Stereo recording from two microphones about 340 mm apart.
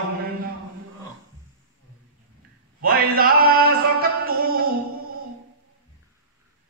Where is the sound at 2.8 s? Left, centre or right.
Right.